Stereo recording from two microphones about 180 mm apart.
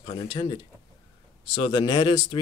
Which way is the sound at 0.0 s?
35° left (ahead or behind).